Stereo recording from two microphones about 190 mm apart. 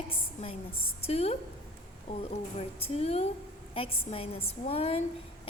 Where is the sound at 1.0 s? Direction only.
35° left (ahead or behind).